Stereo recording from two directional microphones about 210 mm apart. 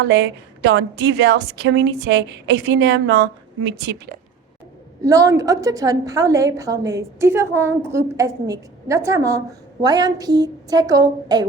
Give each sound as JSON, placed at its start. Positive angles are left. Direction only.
{"t": 0.0, "sound": "a woman's voice", "side_deg": -55}
{"t": 5.0, "sound": "a woman's voice", "side_deg": -15}